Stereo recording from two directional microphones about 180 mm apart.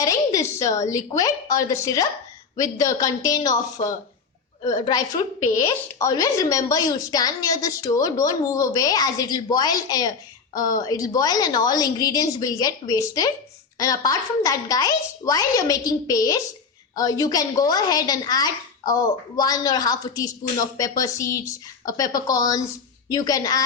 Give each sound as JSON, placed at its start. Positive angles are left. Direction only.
{"t": 0.0, "sound": "a woman's voice", "side_deg": 20}